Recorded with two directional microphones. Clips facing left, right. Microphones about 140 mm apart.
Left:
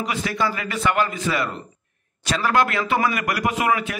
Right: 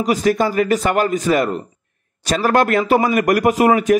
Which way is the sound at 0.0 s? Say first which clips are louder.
Right 8 dB; 40° right (ahead or behind).